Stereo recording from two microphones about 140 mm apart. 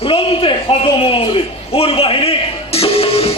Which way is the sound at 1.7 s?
40° left (ahead or behind).